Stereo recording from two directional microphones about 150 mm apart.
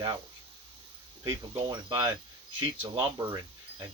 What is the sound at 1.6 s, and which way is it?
Speech, 25° right (ahead or behind).